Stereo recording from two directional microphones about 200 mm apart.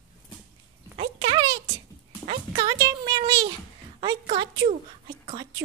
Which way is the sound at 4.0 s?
30° right (ahead or behind).